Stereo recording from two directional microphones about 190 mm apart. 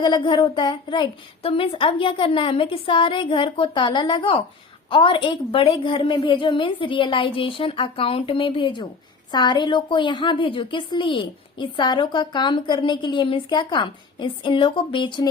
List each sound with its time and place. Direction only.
0.0 s a woman's voice: 25° left (ahead or behind)